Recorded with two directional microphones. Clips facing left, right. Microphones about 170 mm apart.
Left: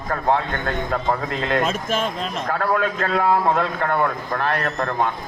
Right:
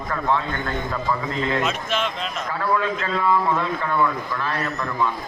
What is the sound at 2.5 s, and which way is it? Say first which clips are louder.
A man's voice: left 1 dB; 60° left (ahead or behind).